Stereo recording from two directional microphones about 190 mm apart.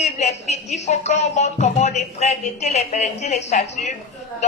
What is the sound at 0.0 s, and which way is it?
A woman's voice, 35° left (ahead or behind).